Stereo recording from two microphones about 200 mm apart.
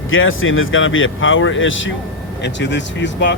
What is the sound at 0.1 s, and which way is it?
Speech, 85° left.